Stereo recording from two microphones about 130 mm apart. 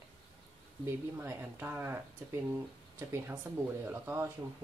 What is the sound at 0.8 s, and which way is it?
Speech, 20° right (ahead or behind).